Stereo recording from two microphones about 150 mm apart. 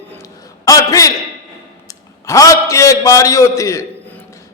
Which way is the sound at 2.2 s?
20° left (ahead or behind).